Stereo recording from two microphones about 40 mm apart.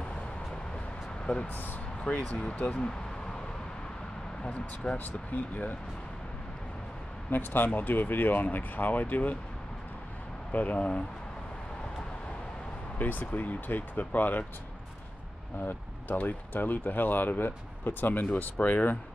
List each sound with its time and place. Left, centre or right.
1.2 s speech: left
1.5 s speech: left
2.0 s speech: left
4.4 s speech: left
4.9 s speech: left
7.2 s speech: left
10.5 s speech: left
12.9 s speech: left
15.6 s speech: left